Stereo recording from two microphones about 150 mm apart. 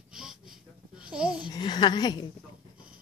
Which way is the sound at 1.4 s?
30° left (ahead or behind).